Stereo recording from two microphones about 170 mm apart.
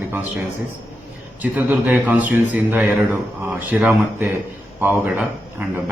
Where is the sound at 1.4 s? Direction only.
10° right (ahead or behind).